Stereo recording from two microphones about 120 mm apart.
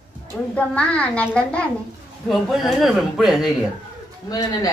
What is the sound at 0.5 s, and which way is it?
A woman's voice, 10° left (ahead or behind).